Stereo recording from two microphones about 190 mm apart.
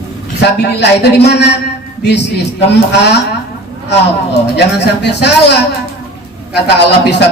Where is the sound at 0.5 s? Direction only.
60° left (ahead or behind).